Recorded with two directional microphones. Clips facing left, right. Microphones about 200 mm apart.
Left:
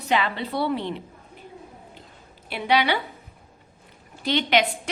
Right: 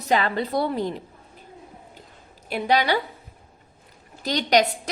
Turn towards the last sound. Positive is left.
turn(degrees=-40)  # may be behind; listen again after turning